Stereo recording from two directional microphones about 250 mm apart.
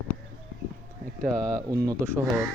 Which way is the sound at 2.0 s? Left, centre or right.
Centre.